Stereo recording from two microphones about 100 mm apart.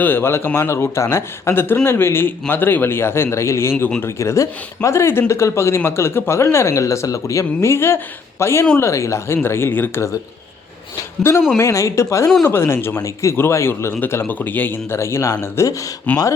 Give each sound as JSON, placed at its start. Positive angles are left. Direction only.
{"t": 0.0, "sound": "speech", "side_deg": 20}
{"t": 11.2, "sound": "speech", "side_deg": 25}
{"t": 16.1, "sound": "speech", "side_deg": 15}